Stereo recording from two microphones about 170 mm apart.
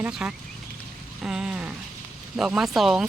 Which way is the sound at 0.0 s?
5° right (ahead or behind).